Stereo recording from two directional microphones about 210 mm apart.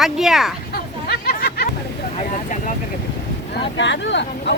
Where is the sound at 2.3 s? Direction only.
35° left (ahead or behind).